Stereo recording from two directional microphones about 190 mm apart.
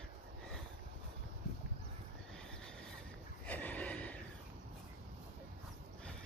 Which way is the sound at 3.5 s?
10° left (ahead or behind).